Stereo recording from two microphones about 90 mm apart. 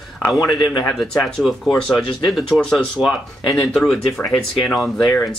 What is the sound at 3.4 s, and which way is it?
Speech, 5° left (ahead or behind).